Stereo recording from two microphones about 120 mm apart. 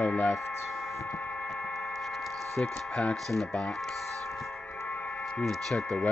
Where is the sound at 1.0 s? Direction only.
15° left (ahead or behind).